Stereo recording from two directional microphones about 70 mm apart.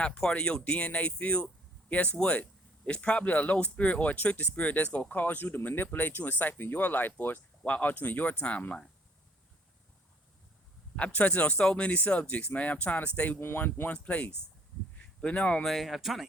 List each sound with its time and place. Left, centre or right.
0.0 s speech: centre
10.9 s speech: centre
13.4 s speech: left
13.9 s speech: centre
15.6 s speech: centre